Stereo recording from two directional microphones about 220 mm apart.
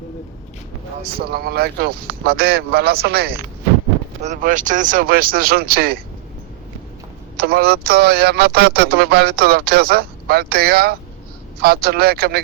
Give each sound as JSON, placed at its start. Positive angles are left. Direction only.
{"t": 1.1, "sound": "speech", "side_deg": -45}
{"t": 7.3, "sound": "speech", "side_deg": -45}